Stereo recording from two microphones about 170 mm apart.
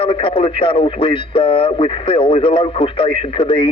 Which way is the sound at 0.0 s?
30° left (ahead or behind).